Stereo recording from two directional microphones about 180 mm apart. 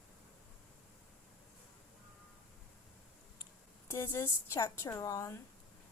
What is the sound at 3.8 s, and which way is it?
A woman's voice, 15° left (ahead or behind).